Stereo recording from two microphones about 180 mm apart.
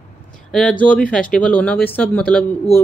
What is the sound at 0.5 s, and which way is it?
Speech, 5° left (ahead or behind).